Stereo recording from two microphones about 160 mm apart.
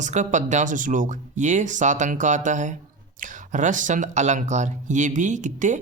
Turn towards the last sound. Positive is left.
turn(degrees=-50)  # may be behind; listen again after turning